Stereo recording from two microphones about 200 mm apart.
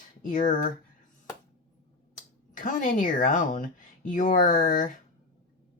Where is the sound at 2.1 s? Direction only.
40° left (ahead or behind).